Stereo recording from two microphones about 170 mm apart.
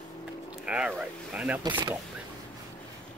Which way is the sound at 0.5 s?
5° right (ahead or behind).